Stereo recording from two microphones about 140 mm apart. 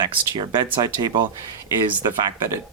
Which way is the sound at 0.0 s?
35° right (ahead or behind).